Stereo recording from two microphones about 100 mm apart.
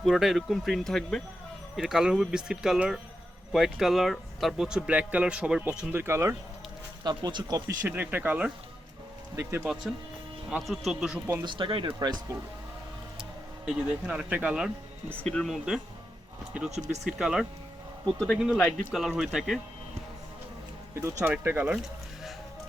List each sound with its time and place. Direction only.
0.0 s speech: 5° right (ahead or behind)
5.9 s speech: 25° right (ahead or behind)
7.0 s speech: 45° right (ahead or behind)
7.9 s speech: 20° right (ahead or behind)
9.3 s speech: 30° right (ahead or behind)
10.6 s speech: centre (ahead or behind)
11.4 s speech: 55° right (ahead or behind)
11.9 s speech: 40° right (ahead or behind)
13.7 s speech: 10° right (ahead or behind)
15.2 s speech: 5° left (ahead or behind)
18.3 s speech: 10° right (ahead or behind)
20.9 s speech: 30° right (ahead or behind)